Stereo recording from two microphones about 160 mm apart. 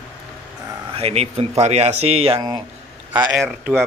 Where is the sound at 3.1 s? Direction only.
10° right (ahead or behind).